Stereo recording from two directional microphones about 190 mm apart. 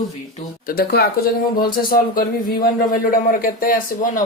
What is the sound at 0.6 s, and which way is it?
Speech, 55° left (ahead or behind).